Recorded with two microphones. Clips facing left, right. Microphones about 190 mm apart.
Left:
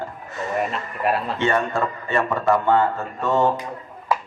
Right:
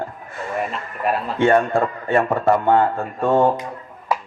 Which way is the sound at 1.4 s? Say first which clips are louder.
Right 9 dB; 50° right (ahead or behind).